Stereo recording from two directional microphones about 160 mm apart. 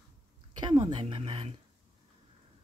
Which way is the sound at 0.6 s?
30° right (ahead or behind).